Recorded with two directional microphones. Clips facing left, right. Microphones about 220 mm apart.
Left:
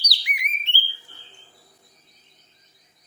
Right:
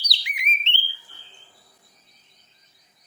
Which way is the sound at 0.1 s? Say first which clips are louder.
Right 1 dB; 25° right (ahead or behind).